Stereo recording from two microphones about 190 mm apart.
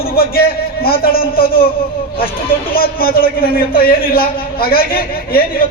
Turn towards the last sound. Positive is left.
turn(degrees=50)  # may be behind; listen again after turning